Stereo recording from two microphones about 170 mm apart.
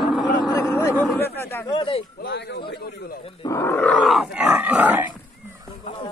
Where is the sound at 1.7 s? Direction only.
30° left (ahead or behind).